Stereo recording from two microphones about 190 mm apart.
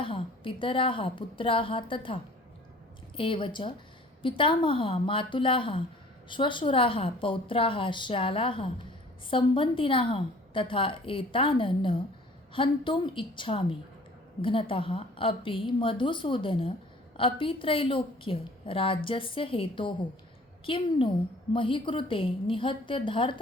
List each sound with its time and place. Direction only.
0.0 s a woman's voice: 25° left (ahead or behind)